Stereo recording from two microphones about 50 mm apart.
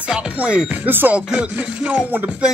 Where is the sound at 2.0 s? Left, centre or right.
Right.